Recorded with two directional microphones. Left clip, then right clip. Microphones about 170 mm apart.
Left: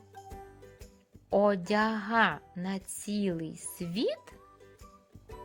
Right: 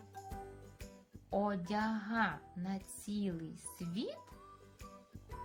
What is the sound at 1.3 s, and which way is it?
Speech, 45° left (ahead or behind).